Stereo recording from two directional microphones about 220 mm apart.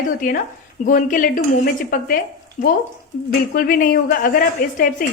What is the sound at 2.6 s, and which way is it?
A woman's voice, 35° left (ahead or behind).